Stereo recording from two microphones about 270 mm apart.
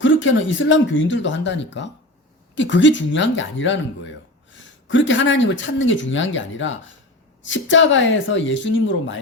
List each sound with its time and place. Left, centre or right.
0.0 s speech: left